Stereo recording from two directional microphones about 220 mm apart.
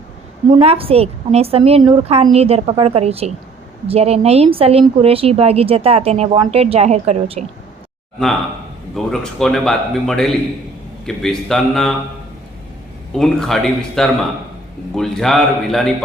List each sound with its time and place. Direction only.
0.6 s a woman's voice: 25° right (ahead or behind)
9.0 s a man's voice: centre (ahead or behind)
13.1 s a man's voice: centre (ahead or behind)